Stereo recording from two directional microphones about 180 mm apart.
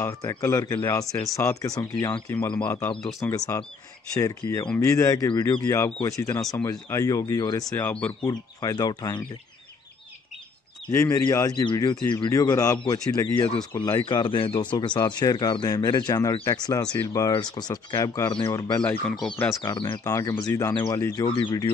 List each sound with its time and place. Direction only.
0.0 s speech: 15° left (ahead or behind)
7.7 s speech: 10° left (ahead or behind)
8.3 s speech: 20° left (ahead or behind)
10.9 s speech: 15° left (ahead or behind)
18.8 s speech: 5° left (ahead or behind)
19.6 s speech: 20° left (ahead or behind)